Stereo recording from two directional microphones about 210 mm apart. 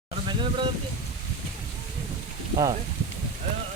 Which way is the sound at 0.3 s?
25° right (ahead or behind).